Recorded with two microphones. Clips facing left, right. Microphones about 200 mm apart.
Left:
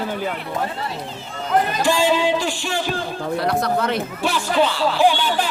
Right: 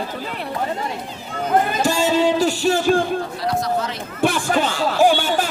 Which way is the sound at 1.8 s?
40° right (ahead or behind).